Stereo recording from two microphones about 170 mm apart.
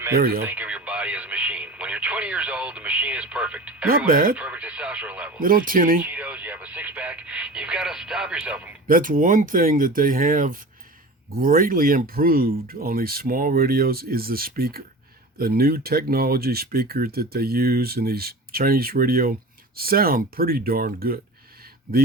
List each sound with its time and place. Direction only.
0.2 s speech: 60° right (ahead or behind)
0.4 s radio: 10° right (ahead or behind)
3.8 s speech: 55° right (ahead or behind)
4.4 s speech: 10° right (ahead or behind)
5.4 s speech: 55° right (ahead or behind)
6.0 s speech: 10° right (ahead or behind)
8.9 s speech: 55° right (ahead or behind)